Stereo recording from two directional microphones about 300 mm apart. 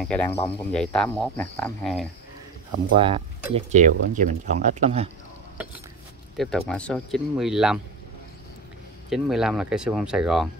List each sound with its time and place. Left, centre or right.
0.0 s speech: centre
3.0 s speech: centre
6.3 s speech: centre
9.1 s speech: centre